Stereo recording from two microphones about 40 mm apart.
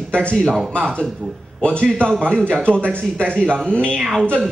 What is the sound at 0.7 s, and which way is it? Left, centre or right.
Speech, left.